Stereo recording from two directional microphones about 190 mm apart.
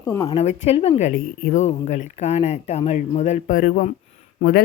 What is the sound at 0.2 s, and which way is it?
Speech, 30° left (ahead or behind).